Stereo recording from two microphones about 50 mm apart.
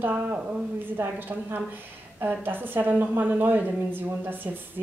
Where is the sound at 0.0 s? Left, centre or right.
Right.